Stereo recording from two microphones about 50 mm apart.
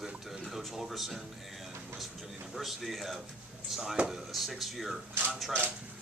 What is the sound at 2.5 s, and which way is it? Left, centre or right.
Speech, centre.